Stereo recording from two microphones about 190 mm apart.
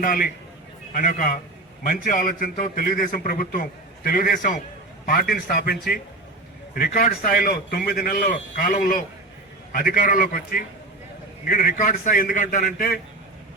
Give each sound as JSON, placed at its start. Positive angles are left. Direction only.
{"t": 0.0, "sound": "a man's voice", "side_deg": 50}